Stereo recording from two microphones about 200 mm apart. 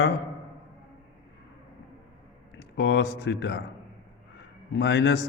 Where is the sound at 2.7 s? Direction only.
60° left (ahead or behind).